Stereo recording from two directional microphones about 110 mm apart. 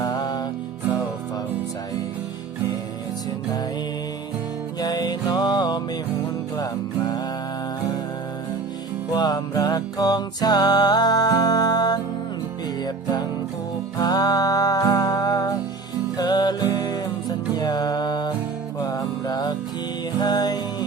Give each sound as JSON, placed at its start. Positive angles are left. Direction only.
{"t": 0.0, "sound": "music", "side_deg": 35}
{"t": 4.8, "sound": "music", "side_deg": 40}
{"t": 9.1, "sound": "music", "side_deg": 40}